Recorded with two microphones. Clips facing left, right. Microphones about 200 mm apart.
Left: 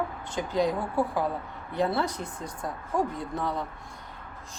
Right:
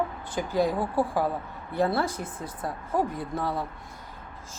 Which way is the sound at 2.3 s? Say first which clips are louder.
Right 1 dB; 5° right (ahead or behind).